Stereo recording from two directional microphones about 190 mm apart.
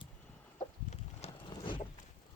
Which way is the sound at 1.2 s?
25° left (ahead or behind).